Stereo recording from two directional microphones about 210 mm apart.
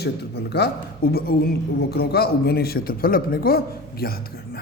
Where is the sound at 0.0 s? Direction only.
50° left (ahead or behind).